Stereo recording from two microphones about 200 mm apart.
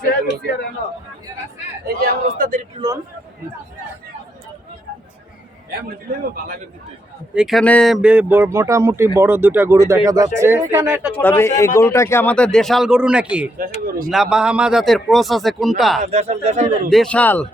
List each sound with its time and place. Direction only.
0.3 s a man's voice: 50° left (ahead or behind)
1.9 s a man's voice: 45° right (ahead or behind)
2.8 s speech: 20° right (ahead or behind)
7.3 s speech: centre (ahead or behind)
11.1 s a man's voice: 10° left (ahead or behind)
13.8 s a man's voice: 50° right (ahead or behind)
14.1 s a man's voice: centre (ahead or behind)
16.0 s a man's voice: 35° right (ahead or behind)
16.9 s a man's voice: 5° left (ahead or behind)